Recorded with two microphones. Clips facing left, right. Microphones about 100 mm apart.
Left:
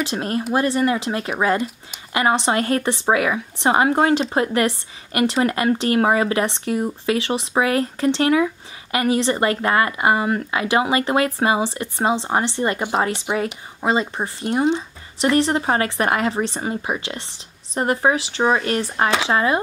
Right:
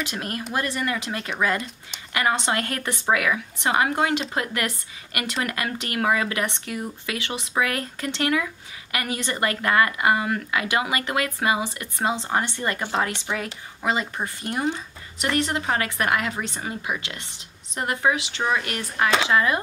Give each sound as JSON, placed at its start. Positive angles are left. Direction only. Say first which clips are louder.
{"t": 0.0, "sound": "speech", "louder": "left 7 dB", "side_deg": 30}
{"t": 15.1, "sound": "speech", "louder": "left 7 dB", "side_deg": 30}